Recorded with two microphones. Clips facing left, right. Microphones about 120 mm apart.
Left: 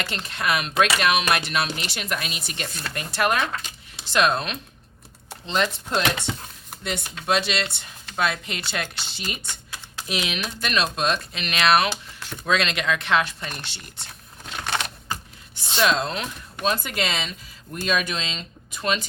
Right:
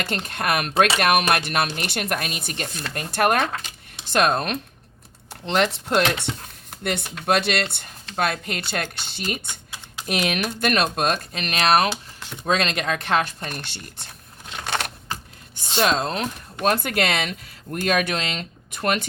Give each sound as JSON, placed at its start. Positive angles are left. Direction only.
{"t": 0.0, "sound": "speech", "side_deg": -50}
{"t": 3.6, "sound": "a sound", "side_deg": -50}
{"t": 5.5, "sound": "speech", "side_deg": -65}
{"t": 15.8, "sound": "speech", "side_deg": -40}
{"t": 16.6, "sound": "speech", "side_deg": -60}